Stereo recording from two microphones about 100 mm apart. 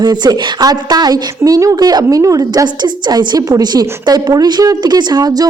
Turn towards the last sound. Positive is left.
turn(degrees=-45)  # may be behind; listen again after turning